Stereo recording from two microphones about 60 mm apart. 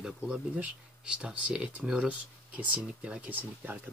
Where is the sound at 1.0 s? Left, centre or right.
Centre.